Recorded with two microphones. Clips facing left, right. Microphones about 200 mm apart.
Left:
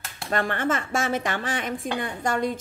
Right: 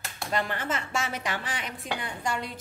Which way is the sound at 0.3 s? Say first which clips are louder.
Left 5 dB; 55° left (ahead or behind).